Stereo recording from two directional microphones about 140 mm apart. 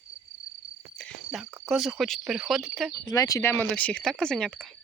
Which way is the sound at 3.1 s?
25° left (ahead or behind).